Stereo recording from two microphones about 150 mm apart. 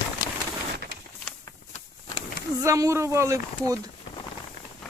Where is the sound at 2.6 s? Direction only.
20° right (ahead or behind).